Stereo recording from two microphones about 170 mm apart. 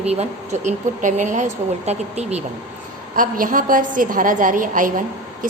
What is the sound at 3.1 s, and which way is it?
A woman's voice, 55° right (ahead or behind).